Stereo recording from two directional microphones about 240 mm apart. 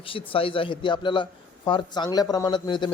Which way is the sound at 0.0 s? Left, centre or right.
Left.